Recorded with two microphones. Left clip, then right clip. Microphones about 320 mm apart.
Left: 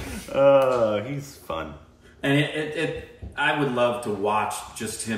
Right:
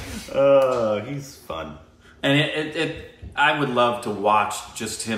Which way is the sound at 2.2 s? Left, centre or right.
Centre.